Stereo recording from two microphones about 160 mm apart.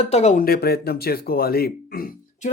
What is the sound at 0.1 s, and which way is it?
Speech, 45° left (ahead or behind).